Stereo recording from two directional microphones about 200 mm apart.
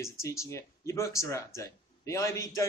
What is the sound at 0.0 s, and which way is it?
Speech, 15° left (ahead or behind).